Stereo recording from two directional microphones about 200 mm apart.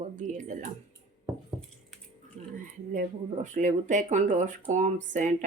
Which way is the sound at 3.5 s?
35° right (ahead or behind).